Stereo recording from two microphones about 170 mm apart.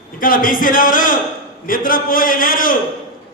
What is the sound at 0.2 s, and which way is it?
A man's voice, 55° left (ahead or behind).